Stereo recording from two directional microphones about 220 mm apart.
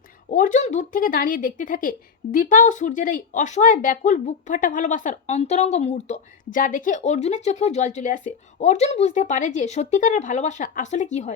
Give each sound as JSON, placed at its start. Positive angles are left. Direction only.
{"t": 0.3, "sound": "speech", "side_deg": 35}